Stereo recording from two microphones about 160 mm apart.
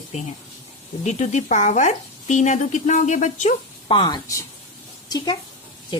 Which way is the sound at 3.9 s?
25° left (ahead or behind).